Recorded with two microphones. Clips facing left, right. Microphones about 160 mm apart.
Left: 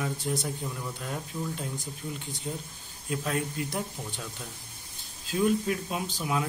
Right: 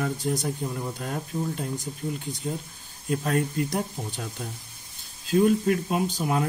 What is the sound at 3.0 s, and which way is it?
Speech, 50° right (ahead or behind).